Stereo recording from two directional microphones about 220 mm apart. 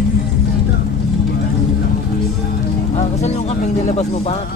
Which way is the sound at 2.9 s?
30° left (ahead or behind).